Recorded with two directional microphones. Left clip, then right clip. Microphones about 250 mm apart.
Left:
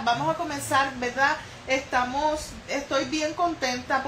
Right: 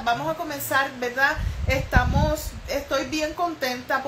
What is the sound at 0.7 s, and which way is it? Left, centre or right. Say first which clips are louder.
A woman's voice: right 1 dB; centre.